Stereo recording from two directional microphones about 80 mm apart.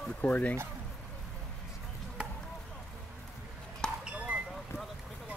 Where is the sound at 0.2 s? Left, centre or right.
Centre.